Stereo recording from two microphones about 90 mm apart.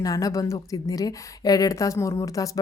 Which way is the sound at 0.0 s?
40° left (ahead or behind).